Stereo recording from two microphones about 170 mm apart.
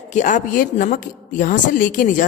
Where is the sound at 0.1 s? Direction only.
45° left (ahead or behind).